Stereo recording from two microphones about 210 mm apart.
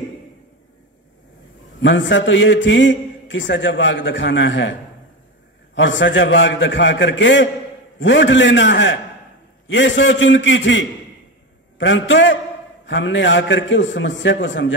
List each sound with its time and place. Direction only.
1.8 s a man's voice: 60° left (ahead or behind)
5.8 s a man's voice: 60° left (ahead or behind)